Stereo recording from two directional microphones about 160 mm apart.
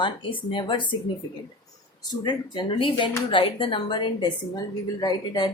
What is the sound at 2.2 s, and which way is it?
A woman's voice, 30° left (ahead or behind).